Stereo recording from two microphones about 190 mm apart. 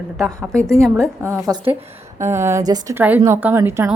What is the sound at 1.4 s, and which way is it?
A woman's voice, 20° right (ahead or behind).